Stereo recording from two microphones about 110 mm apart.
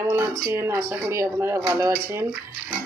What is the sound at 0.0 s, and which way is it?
Speech, 20° right (ahead or behind).